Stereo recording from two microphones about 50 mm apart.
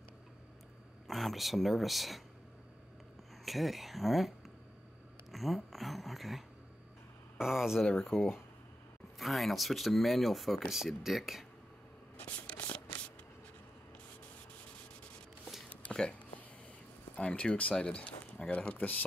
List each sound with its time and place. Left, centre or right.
1.0 s speech: centre
3.4 s speech: centre
5.3 s speech: centre
15.9 s a sound: centre
17.1 s speech: left